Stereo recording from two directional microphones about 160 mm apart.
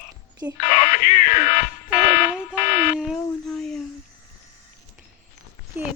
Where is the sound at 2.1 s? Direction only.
55° left (ahead or behind).